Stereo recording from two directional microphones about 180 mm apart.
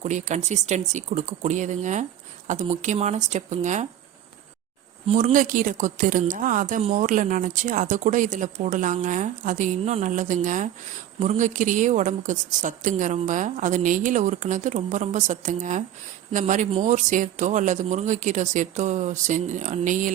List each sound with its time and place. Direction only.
0.0 s speech: 40° right (ahead or behind)
5.0 s a woman's voice: 40° right (ahead or behind)